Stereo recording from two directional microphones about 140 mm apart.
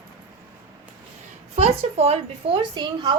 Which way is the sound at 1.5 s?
50° right (ahead or behind).